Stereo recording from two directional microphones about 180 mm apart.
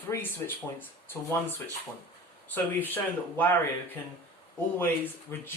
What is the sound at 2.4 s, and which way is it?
Speech, 10° left (ahead or behind).